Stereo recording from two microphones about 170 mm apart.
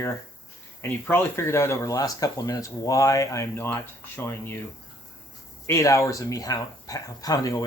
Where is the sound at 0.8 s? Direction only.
15° left (ahead or behind).